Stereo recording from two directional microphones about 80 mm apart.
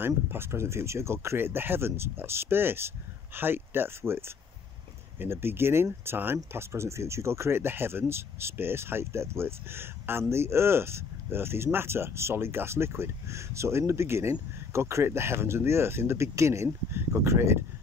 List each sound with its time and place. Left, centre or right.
0.0 s speech: right
5.2 s speech: right